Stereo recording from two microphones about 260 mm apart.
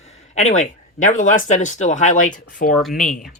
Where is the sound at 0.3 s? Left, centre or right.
Left.